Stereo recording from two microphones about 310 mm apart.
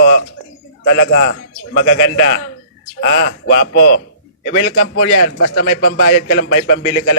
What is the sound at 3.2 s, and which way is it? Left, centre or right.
A man's voice, left.